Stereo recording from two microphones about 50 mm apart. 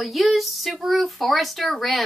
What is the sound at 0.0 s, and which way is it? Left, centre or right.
A woman's voice, centre.